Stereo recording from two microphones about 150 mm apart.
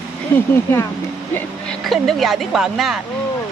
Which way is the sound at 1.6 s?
Centre (ahead or behind).